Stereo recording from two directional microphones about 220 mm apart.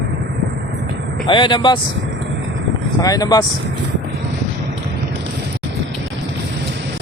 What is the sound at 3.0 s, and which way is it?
Speech, 15° left (ahead or behind).